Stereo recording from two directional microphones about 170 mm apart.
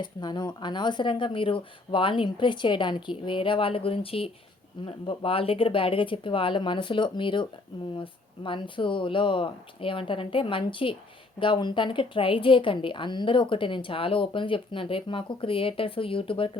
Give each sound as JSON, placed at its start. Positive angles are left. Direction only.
{"t": 0.0, "sound": "a woman's voice", "side_deg": 25}